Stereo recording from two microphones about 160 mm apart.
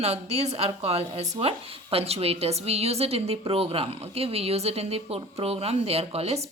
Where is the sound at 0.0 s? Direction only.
40° right (ahead or behind).